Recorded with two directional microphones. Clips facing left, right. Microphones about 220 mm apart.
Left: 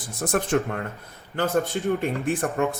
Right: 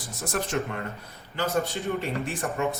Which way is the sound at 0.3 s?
55° left (ahead or behind).